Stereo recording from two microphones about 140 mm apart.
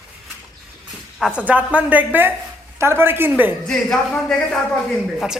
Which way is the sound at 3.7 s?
5° left (ahead or behind).